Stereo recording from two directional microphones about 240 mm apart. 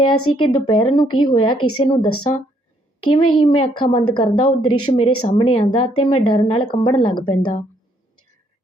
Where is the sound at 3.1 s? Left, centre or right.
Left.